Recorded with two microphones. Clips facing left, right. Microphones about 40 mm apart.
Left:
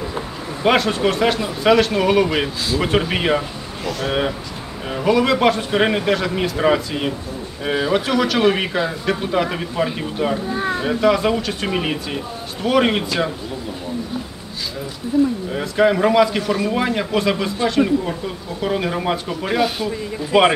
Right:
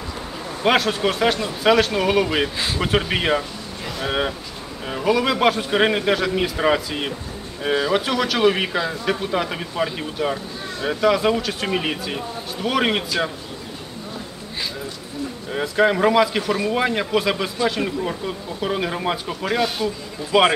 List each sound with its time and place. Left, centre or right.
0.7 s speech: centre
10.5 s a sound: left
10.9 s speech: centre
15.5 s speech: centre
20.3 s speech: left